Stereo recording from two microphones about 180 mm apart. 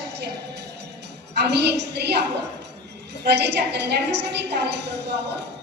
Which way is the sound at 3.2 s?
70° right (ahead or behind).